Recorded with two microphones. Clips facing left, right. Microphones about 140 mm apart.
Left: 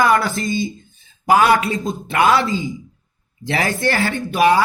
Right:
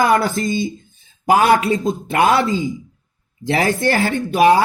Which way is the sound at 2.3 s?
50° right (ahead or behind).